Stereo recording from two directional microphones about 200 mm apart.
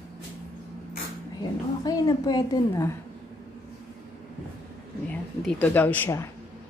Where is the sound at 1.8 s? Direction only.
20° left (ahead or behind).